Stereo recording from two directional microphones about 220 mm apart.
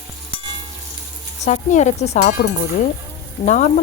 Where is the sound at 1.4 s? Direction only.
30° left (ahead or behind).